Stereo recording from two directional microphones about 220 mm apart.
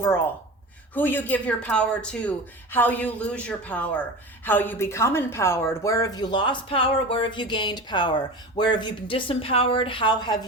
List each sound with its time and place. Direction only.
0.9 s a woman's voice: 10° left (ahead or behind)